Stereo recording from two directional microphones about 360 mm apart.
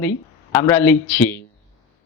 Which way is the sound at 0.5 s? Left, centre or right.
Centre.